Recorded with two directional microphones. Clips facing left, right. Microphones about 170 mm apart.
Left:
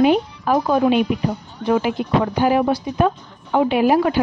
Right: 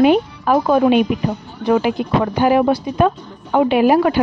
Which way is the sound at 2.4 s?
70° right (ahead or behind).